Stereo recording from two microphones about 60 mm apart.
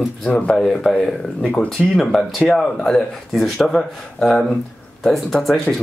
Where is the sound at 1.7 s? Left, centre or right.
Centre.